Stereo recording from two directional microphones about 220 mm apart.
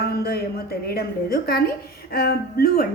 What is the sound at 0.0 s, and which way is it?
A woman's voice, 45° left (ahead or behind).